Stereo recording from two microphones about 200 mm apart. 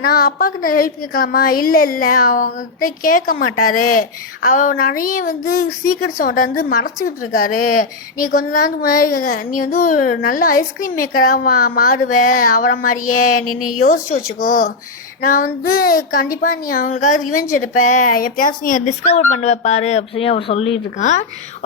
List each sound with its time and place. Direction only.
0.0 s a woman's voice: 45° left (ahead or behind)
13.4 s speech: 90° left
13.8 s a woman's voice: 40° left (ahead or behind)